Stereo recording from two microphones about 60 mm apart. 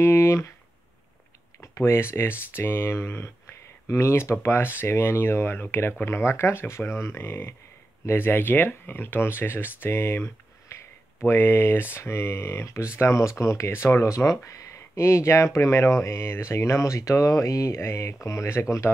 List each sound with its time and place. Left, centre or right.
0.0 s speech: left
1.6 s speech: left
17.7 s speech: left